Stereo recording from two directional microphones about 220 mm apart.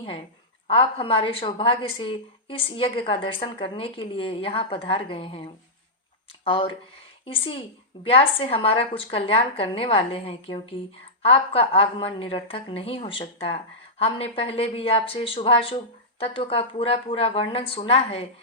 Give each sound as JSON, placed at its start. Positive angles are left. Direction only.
{"t": 0.7, "sound": "a woman's voice", "side_deg": 25}
{"t": 6.4, "sound": "speech", "side_deg": 25}
{"t": 8.0, "sound": "a woman's voice", "side_deg": 25}